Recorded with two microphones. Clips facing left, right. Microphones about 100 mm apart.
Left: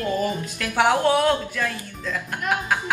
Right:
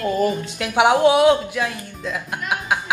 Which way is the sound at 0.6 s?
15° right (ahead or behind).